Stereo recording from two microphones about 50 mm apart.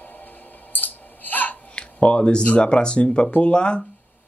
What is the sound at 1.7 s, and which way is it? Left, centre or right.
Speech, left.